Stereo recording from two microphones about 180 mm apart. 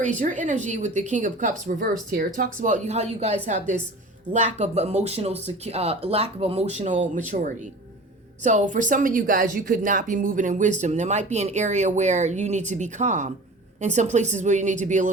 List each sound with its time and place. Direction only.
0.0 s speech: 45° right (ahead or behind)